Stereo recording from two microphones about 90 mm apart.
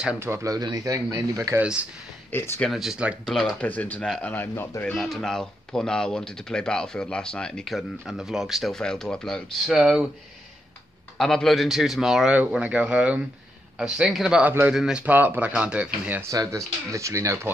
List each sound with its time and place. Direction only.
0.2 s speech: 35° right (ahead or behind)
1.6 s speech: 15° right (ahead or behind)
2.3 s speech: 30° left (ahead or behind)
2.7 s speech: centre (ahead or behind)
3.6 s speech: 20° left (ahead or behind)
4.9 s speech: centre (ahead or behind)
11.1 s speech: 5° left (ahead or behind)
12.4 s speech: 15° right (ahead or behind)
14.4 s speech: 20° right (ahead or behind)
14.7 s speech: 5° right (ahead or behind)
16.2 s speech: 35° right (ahead or behind)